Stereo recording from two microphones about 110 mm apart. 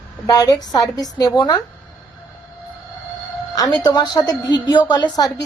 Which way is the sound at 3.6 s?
35° left (ahead or behind).